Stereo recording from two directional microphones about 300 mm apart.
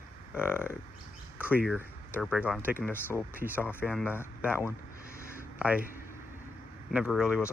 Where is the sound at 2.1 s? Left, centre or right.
Centre.